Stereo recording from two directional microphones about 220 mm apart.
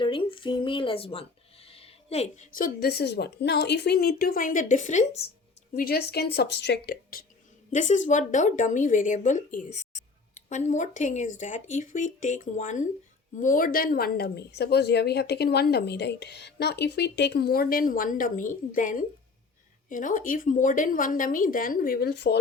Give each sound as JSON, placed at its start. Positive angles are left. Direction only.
{"t": 0.0, "sound": "speech", "side_deg": 25}
{"t": 5.7, "sound": "speech", "side_deg": 45}
{"t": 9.7, "sound": "a sound", "side_deg": 35}
{"t": 11.3, "sound": "speech", "side_deg": 35}